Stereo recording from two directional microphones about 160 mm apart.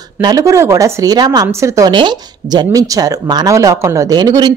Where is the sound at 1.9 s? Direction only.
30° right (ahead or behind).